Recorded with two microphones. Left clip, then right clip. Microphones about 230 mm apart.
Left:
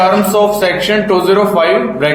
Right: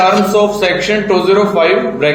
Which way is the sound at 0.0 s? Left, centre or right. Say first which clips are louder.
Even; left.